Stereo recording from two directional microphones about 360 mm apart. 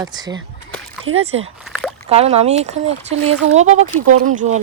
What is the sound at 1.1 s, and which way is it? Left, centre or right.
Speech, right.